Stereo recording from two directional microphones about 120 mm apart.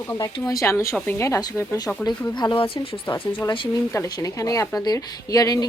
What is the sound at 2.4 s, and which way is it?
A woman's voice, 40° left (ahead or behind).